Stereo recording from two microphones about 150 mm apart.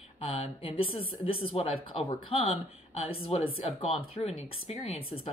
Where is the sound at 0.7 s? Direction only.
35° left (ahead or behind).